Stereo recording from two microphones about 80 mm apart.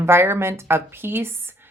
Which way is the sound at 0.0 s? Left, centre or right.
Right.